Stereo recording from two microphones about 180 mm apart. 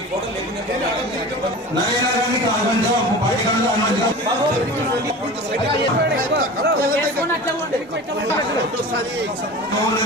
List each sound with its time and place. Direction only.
6.3 s speech: 65° right (ahead or behind)